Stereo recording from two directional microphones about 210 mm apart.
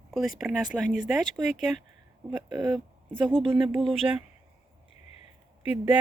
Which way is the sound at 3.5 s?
25° right (ahead or behind).